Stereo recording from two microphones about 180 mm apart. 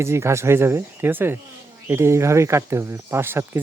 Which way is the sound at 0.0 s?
15° right (ahead or behind).